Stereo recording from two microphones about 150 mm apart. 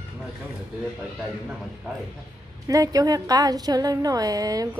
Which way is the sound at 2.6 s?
25° right (ahead or behind).